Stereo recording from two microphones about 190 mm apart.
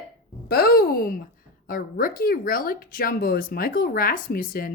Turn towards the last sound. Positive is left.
turn(degrees=50)  # may be behind; listen again after turning